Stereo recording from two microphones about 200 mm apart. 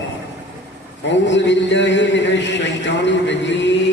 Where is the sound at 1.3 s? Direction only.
65° left (ahead or behind).